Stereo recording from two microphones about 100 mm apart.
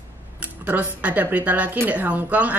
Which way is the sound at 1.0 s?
15° right (ahead or behind).